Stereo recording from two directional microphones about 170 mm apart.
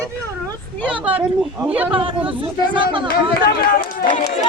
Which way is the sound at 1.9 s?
30° right (ahead or behind).